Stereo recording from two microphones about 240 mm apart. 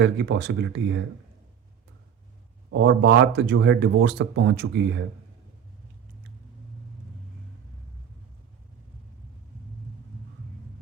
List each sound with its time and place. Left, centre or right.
0.0 s speech: right
2.6 s speech: right